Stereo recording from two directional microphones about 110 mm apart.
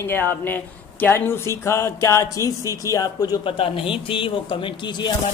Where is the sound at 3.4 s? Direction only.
55° left (ahead or behind).